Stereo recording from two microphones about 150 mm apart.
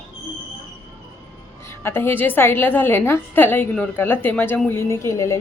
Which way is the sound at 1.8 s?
15° left (ahead or behind).